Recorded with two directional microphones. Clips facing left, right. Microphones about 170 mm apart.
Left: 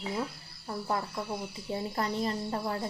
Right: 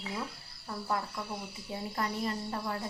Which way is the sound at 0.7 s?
35° left (ahead or behind).